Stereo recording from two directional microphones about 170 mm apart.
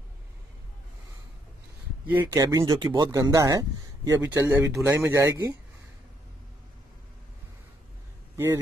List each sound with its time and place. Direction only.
2.1 s speech: 15° right (ahead or behind)
4.2 s speech: 10° right (ahead or behind)